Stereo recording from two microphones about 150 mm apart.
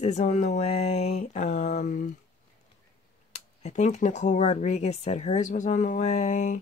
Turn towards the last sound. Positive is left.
turn(degrees=50)  # may be behind; listen again after turning